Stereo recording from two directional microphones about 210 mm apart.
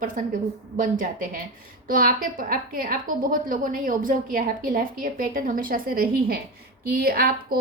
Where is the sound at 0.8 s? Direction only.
40° right (ahead or behind).